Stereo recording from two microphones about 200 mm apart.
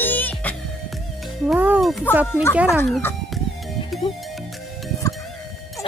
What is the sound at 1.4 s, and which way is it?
Speech, 10° right (ahead or behind).